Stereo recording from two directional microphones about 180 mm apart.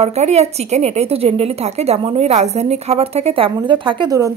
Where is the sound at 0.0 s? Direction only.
35° right (ahead or behind).